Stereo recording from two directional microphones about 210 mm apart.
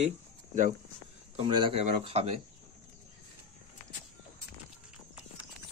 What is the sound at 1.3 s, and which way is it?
Speech, 25° right (ahead or behind).